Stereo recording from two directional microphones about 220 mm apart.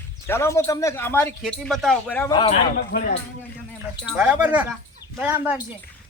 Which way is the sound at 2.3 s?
20° left (ahead or behind).